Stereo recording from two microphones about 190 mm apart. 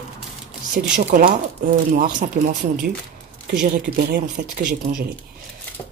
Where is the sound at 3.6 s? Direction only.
50° right (ahead or behind).